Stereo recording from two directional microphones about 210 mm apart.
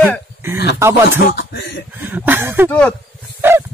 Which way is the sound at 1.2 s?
50° left (ahead or behind).